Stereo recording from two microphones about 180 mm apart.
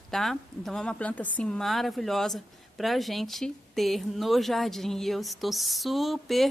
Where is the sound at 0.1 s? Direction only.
Centre (ahead or behind).